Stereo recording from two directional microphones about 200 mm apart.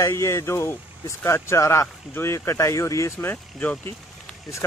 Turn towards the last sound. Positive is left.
turn(degrees=5)  # may be behind; listen again after turning